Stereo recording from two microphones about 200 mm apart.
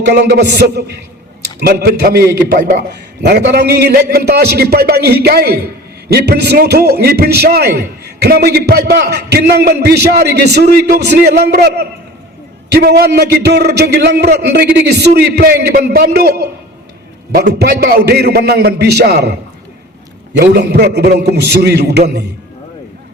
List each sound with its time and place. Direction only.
0.1 s a man's voice: 55° right (ahead or behind)
20.4 s a man's voice: 55° right (ahead or behind)